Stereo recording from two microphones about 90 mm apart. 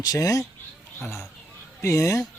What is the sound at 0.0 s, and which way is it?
Speech, 40° left (ahead or behind).